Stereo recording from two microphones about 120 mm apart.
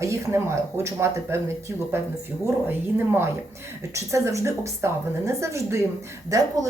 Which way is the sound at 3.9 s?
25° right (ahead or behind).